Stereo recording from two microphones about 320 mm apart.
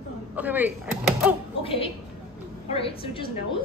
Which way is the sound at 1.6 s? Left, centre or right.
Centre.